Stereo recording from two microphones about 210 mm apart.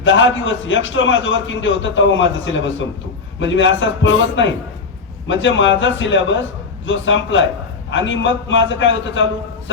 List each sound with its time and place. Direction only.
0.0 s a man's voice: 65° left (ahead or behind)